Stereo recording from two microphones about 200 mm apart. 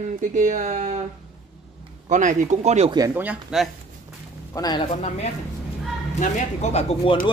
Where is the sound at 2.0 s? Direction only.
40° right (ahead or behind).